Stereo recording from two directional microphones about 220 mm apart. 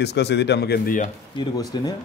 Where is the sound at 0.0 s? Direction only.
50° left (ahead or behind).